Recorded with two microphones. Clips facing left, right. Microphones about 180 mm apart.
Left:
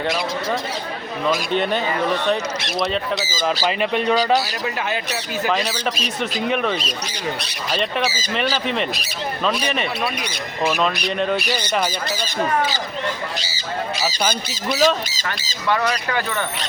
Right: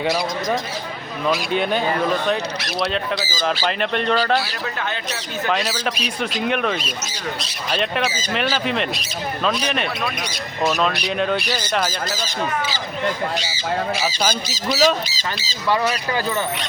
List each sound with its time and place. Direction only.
1.3 s speech: 5° right (ahead or behind)
3.2 s speech: 25° left (ahead or behind)
3.6 s speech: 5° left (ahead or behind)
5.5 s speech: centre (ahead or behind)
10.6 s speech: 10° left (ahead or behind)
10.8 s speech: centre (ahead or behind)
11.9 s speech: 65° left (ahead or behind)
14.7 s speech: 5° right (ahead or behind)
15.0 s speech: 50° left (ahead or behind)
15.7 s speech: 10° right (ahead or behind)